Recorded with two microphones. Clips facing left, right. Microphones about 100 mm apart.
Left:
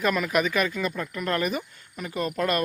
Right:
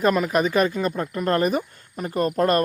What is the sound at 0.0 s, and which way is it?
Speech, 35° right (ahead or behind).